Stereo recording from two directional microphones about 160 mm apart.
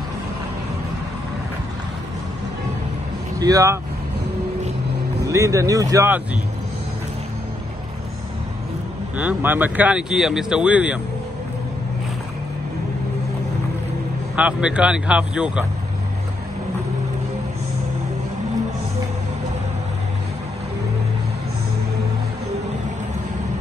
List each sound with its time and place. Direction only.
3.3 s speech: 20° right (ahead or behind)
5.2 s speech: 20° right (ahead or behind)
9.1 s speech: 10° right (ahead or behind)
14.3 s speech: 5° right (ahead or behind)